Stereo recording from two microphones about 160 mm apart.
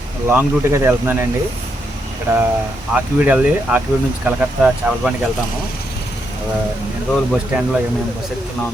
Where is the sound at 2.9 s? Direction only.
10° right (ahead or behind).